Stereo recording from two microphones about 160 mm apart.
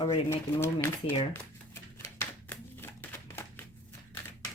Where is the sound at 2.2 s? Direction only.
15° left (ahead or behind).